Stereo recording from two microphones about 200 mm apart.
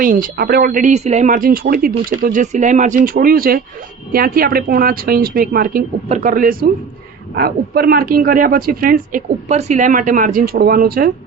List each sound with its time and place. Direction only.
0.0 s a man's voice: 45° right (ahead or behind)